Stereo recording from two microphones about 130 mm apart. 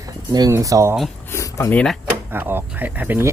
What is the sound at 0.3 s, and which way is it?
Speech, 30° right (ahead or behind).